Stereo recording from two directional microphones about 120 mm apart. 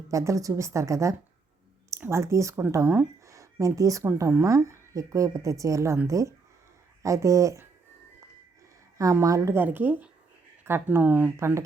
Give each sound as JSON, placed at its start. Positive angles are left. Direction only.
{"t": 0.1, "sound": "speech", "side_deg": -25}
{"t": 9.0, "sound": "speech", "side_deg": -30}